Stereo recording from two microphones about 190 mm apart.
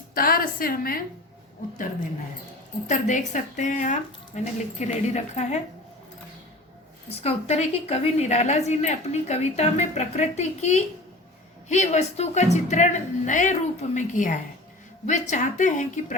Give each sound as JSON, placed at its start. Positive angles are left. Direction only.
{"t": 0.1, "sound": "a woman's voice", "side_deg": 50}
{"t": 2.8, "sound": "a woman's voice", "side_deg": 40}
{"t": 7.2, "sound": "a woman's voice", "side_deg": 35}